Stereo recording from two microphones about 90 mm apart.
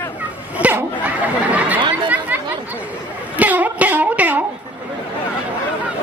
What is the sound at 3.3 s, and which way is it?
Music, 20° right (ahead or behind).